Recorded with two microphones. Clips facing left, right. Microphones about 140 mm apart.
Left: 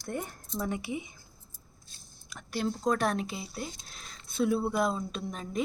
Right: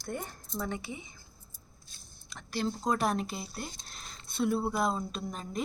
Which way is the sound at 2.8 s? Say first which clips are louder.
Left 2 dB; 5° right (ahead or behind).